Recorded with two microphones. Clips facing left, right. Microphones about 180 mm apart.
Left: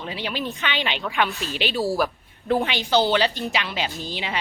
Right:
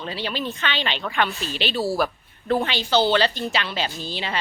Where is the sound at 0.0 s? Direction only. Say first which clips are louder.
Right 1 dB; 10° left (ahead or behind).